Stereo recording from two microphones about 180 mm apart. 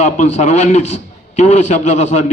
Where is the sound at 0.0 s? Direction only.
40° left (ahead or behind).